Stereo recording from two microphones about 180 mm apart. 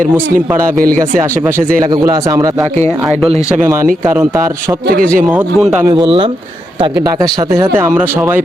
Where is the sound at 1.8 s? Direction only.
20° right (ahead or behind).